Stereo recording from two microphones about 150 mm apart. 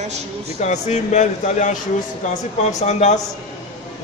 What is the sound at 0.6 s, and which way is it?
A man's voice, 50° left (ahead or behind).